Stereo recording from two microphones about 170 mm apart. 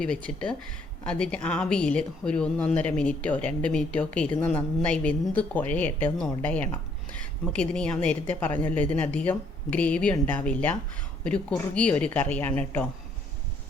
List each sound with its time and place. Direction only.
0.0 s a woman's voice: 5° left (ahead or behind)